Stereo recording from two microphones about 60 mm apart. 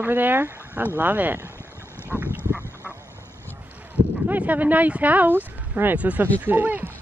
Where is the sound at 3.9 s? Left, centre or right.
Right.